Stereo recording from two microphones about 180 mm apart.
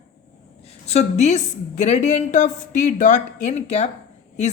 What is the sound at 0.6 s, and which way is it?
A woman's voice, 35° left (ahead or behind).